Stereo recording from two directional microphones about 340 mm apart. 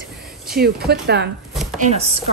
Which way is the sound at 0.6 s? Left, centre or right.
Right.